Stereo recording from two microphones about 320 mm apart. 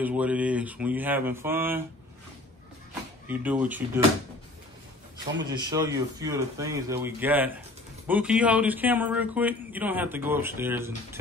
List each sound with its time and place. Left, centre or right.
0.0 s speech: centre
3.3 s speech: centre
5.7 s speech: centre